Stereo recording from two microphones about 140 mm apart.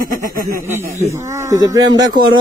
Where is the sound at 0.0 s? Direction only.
80° right.